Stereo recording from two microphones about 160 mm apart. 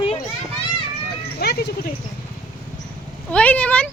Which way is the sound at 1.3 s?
80° left.